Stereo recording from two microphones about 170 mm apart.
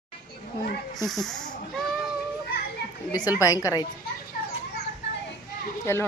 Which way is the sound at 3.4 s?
20° left (ahead or behind).